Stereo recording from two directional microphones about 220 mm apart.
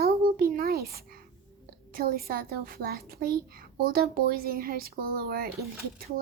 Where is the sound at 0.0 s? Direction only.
40° right (ahead or behind).